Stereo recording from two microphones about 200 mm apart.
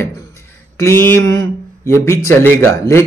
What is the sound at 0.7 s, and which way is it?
Speech, 15° left (ahead or behind).